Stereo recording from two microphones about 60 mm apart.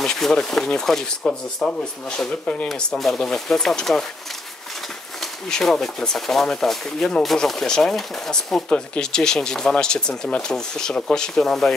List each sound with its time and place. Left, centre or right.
0.0 s speech: centre
2.7 s speech: centre
5.2 s speech: centre